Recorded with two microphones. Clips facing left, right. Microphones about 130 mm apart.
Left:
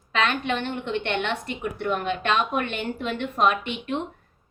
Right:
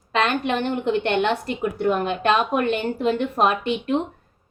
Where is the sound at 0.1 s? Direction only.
40° right (ahead or behind).